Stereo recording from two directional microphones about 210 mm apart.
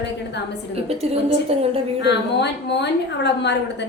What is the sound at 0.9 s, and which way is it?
Speech, 30° right (ahead or behind).